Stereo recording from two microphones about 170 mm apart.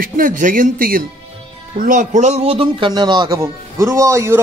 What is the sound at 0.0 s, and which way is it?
A man's voice, 55° right (ahead or behind).